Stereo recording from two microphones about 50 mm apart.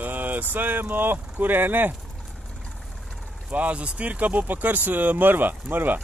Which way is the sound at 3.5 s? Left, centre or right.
Right.